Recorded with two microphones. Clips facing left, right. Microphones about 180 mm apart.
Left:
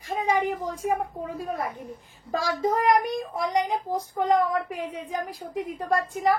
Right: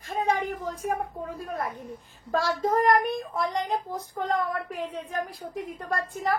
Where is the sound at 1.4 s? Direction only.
15° left (ahead or behind).